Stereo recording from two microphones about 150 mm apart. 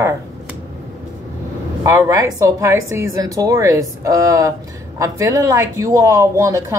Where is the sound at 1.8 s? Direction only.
20° right (ahead or behind).